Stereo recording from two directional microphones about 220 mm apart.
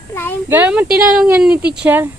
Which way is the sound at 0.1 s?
10° left (ahead or behind).